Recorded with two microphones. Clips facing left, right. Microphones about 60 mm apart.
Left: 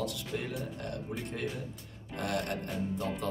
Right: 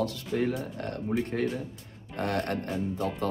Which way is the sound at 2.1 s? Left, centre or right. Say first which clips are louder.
Right 4 dB; right.